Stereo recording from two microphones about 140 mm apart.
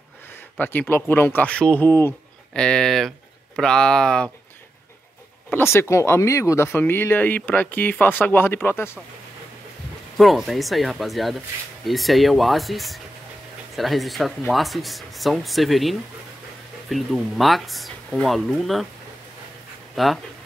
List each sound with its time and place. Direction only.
0.6 s speech: 15° left (ahead or behind)
5.5 s speech: 20° left (ahead or behind)
10.1 s speech: centre (ahead or behind)
20.0 s speech: centre (ahead or behind)